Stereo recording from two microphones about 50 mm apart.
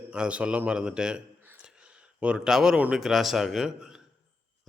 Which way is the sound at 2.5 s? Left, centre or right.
Centre.